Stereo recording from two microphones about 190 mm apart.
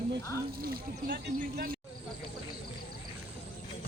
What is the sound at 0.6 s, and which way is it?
Speech, 50° right (ahead or behind).